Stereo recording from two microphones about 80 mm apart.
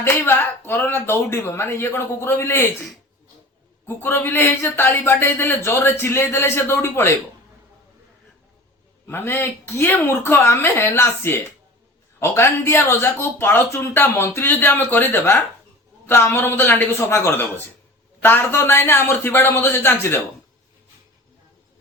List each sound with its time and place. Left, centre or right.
0.0 s speech: left
3.8 s speech: left
9.0 s speech: left